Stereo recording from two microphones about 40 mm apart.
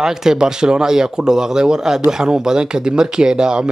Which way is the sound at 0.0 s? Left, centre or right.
Centre.